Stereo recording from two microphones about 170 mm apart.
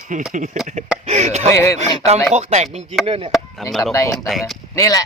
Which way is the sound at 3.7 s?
Centre (ahead or behind).